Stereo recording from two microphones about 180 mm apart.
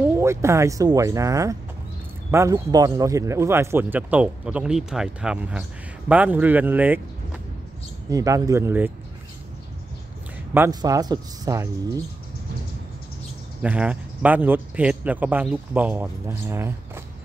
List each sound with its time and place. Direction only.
0.0 s speech: 15° right (ahead or behind)
8.1 s speech: 20° right (ahead or behind)
10.5 s speech: 15° right (ahead or behind)
13.6 s speech: 5° right (ahead or behind)